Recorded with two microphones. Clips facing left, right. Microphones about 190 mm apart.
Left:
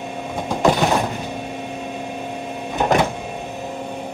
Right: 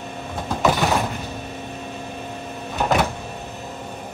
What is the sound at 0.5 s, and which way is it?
Vehicle, 20° left (ahead or behind).